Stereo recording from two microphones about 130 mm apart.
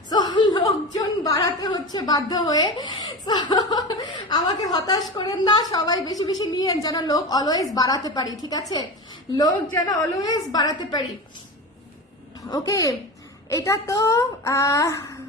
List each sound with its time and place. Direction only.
0.1 s a sound: 30° left (ahead or behind)
2.6 s a woman's voice: 35° left (ahead or behind)
9.7 s speech: 25° left (ahead or behind)
12.4 s a woman's voice: 25° left (ahead or behind)